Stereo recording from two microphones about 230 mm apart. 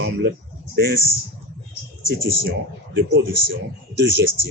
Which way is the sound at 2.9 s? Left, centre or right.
Right.